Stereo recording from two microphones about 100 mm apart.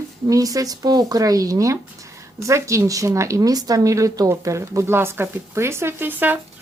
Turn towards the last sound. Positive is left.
turn(degrees=-20)  # may be behind; listen again after turning